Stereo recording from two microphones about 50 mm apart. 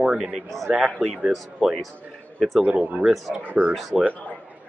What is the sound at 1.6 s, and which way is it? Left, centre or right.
Speech, centre.